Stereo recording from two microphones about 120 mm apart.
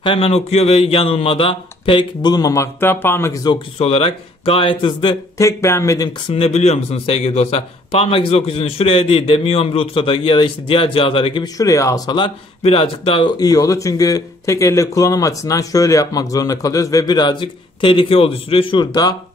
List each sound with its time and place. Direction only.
0.0 s speech: 50° left (ahead or behind); by 3.3 s 20° left (ahead or behind)
3.7 s speech: 55° left (ahead or behind)
5.4 s speech: 25° left (ahead or behind)
6.2 s speech: 55° left (ahead or behind)
11.4 s speech: 30° left (ahead or behind)
12.2 s speech: 50° left (ahead or behind)
13.4 s speech: 30° left (ahead or behind)